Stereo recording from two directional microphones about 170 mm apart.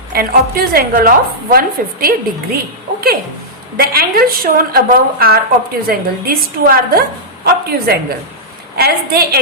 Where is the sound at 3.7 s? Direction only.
65° right (ahead or behind).